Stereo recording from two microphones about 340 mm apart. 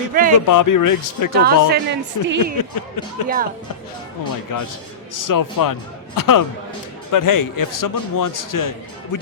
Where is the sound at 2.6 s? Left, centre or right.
Left.